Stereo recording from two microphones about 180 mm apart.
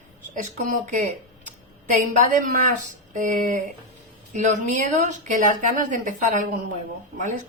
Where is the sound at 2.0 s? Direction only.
45° right (ahead or behind).